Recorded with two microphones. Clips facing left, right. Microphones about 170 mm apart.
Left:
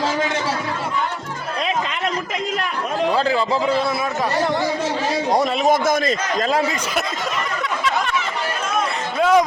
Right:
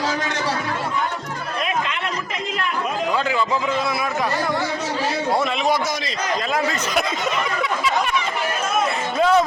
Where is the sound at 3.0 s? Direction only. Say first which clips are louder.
Left 4 dB; 35° left (ahead or behind).